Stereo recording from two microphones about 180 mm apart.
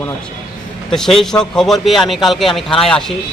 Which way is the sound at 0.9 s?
Centre (ahead or behind).